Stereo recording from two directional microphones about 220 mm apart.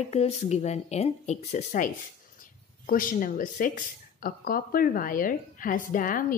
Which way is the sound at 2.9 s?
40° left (ahead or behind).